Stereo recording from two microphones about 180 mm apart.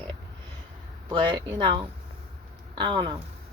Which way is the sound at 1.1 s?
25° right (ahead or behind).